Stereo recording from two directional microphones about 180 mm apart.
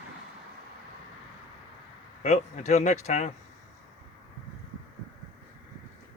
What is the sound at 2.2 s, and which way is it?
Speech, 40° left (ahead or behind).